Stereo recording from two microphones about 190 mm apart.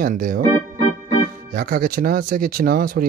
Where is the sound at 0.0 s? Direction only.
45° right (ahead or behind).